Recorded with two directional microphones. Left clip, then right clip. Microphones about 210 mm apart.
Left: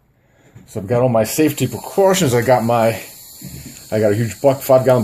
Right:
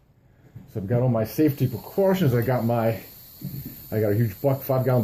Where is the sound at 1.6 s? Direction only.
60° left (ahead or behind).